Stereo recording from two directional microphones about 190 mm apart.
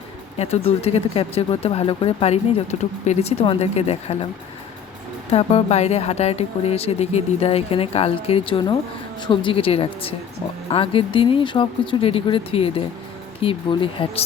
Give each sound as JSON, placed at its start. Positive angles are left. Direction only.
{"t": 0.3, "sound": "speech", "side_deg": 35}
{"t": 5.3, "sound": "speech", "side_deg": 30}